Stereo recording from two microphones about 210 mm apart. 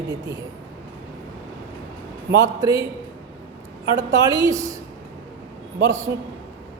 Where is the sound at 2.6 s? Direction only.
15° right (ahead or behind).